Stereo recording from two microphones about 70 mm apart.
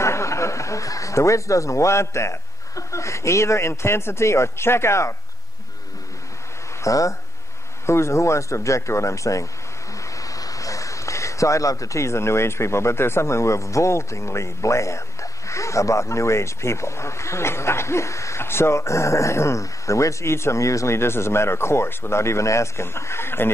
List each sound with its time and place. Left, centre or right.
0.0 s speech: left
6.8 s speech: left
7.8 s speech: left